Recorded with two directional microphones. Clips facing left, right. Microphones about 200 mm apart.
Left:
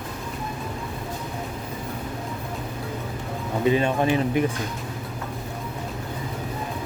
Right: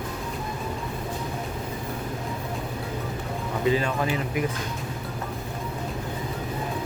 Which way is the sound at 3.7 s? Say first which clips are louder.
Left 4 dB; 25° left (ahead or behind).